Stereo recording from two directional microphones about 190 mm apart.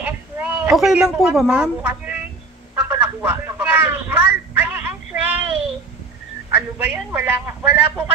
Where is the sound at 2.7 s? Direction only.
15° right (ahead or behind).